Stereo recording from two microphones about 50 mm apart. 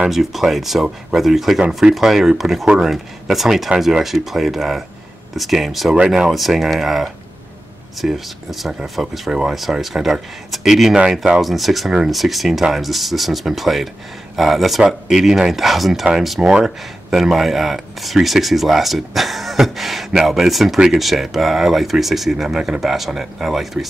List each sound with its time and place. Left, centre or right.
0.1 s speech: centre
6.0 s speech: centre
11.0 s speech: centre
11.4 s speech: centre